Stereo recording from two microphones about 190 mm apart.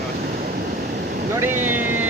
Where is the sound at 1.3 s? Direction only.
10° right (ahead or behind).